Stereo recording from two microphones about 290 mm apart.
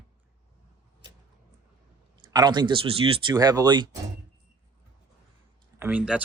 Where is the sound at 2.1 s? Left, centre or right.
Centre.